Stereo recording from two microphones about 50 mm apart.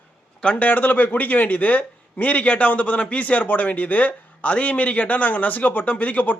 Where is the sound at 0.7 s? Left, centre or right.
Left.